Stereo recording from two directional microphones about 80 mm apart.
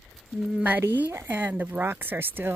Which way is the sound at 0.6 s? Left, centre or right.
Right.